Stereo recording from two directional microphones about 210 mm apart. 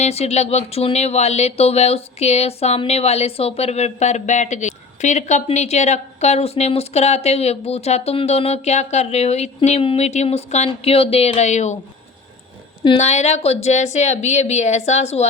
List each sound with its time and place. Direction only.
0.0 s speech: 30° left (ahead or behind)
12.8 s speech: 30° left (ahead or behind)